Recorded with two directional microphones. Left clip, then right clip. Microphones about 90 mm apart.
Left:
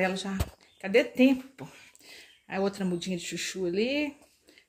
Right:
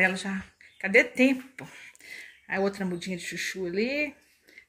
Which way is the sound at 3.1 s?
35° left (ahead or behind).